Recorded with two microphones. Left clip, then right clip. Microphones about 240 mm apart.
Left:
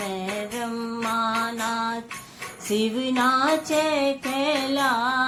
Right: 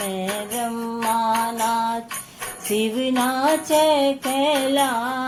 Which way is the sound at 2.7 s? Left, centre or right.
Left.